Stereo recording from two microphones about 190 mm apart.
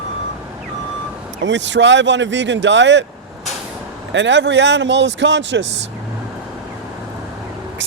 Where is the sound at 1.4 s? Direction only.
70° right (ahead or behind).